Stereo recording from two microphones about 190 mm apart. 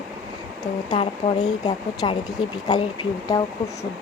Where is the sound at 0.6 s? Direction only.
20° left (ahead or behind).